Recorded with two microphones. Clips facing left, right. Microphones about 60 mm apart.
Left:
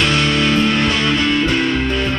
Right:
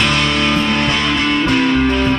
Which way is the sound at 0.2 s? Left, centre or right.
Right.